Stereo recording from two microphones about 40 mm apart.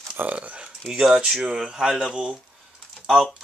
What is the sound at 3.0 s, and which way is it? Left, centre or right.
Speech, centre.